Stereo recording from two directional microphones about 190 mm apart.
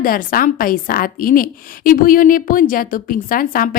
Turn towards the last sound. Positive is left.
turn(degrees=45)  # may be behind; listen again after turning